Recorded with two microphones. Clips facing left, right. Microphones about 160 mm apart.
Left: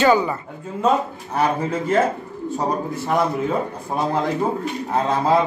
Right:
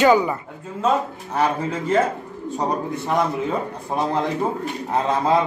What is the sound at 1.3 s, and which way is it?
Speech, 10° left (ahead or behind).